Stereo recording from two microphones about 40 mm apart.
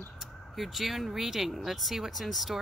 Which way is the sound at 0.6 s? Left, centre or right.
Centre.